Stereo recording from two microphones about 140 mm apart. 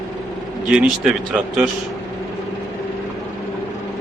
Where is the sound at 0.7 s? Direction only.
5° right (ahead or behind).